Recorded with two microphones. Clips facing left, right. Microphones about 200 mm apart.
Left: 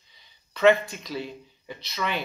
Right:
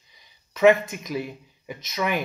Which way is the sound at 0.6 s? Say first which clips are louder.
Right 2 dB; 15° right (ahead or behind).